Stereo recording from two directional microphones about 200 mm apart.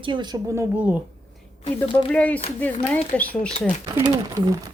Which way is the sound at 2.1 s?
5° left (ahead or behind).